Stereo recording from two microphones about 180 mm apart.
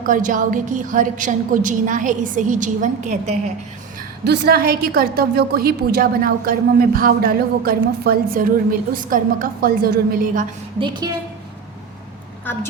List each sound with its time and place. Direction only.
0.0 s a woman's voice: 45° right (ahead or behind)
4.2 s a woman's voice: 70° right (ahead or behind)
10.8 s a woman's voice: 25° right (ahead or behind)
12.5 s a woman's voice: 10° left (ahead or behind)